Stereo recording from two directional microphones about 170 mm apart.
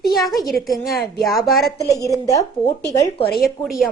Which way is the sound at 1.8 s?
20° left (ahead or behind).